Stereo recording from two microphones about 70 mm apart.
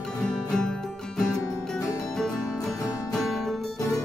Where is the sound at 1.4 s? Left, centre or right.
Left.